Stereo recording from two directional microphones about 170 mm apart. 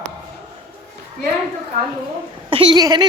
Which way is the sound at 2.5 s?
30° right (ahead or behind).